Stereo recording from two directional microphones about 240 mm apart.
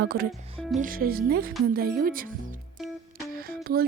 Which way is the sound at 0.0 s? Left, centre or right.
Right.